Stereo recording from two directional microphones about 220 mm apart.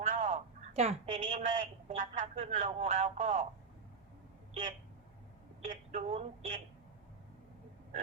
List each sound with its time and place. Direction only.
0.0 s a woman's voice: 30° right (ahead or behind)
5.7 s speech: 30° right (ahead or behind)